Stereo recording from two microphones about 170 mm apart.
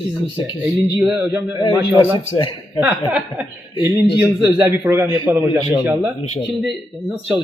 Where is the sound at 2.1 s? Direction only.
25° left (ahead or behind).